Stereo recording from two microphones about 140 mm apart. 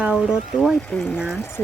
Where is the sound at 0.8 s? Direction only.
10° left (ahead or behind).